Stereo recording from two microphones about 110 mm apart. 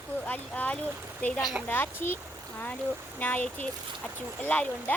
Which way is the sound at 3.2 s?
15° left (ahead or behind).